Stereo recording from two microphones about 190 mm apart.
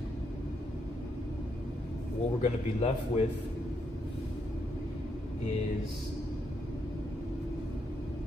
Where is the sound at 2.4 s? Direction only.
35° left (ahead or behind).